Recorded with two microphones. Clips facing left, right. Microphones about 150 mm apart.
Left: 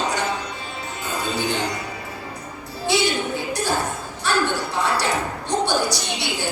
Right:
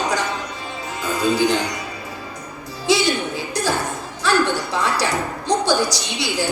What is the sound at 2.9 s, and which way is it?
Music, 90° right.